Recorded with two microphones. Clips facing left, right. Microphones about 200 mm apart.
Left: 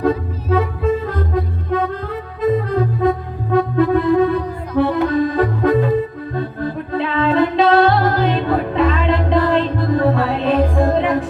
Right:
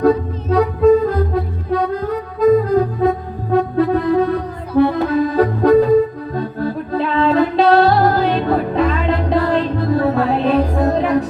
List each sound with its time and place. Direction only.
0.5 s music: 40° right (ahead or behind)
3.5 s accordion: 40° right (ahead or behind)
6.9 s music: 40° right (ahead or behind)